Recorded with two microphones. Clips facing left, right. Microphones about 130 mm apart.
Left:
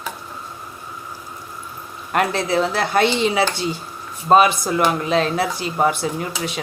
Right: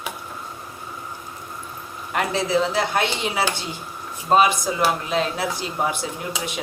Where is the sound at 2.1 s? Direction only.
60° left (ahead or behind).